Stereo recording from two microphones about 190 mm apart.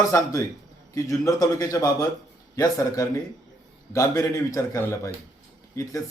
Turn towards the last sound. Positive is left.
turn(degrees=15)  # may be behind; listen again after turning